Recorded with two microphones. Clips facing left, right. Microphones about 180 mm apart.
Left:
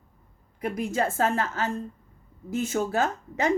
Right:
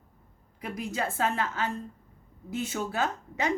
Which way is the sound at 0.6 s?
50° left (ahead or behind).